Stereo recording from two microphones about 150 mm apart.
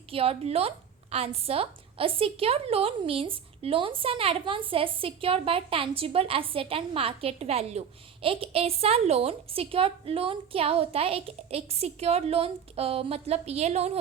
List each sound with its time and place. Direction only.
0.1 s a woman's voice: 40° right (ahead or behind)